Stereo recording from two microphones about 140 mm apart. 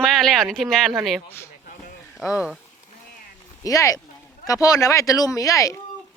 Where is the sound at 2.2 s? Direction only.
Centre (ahead or behind).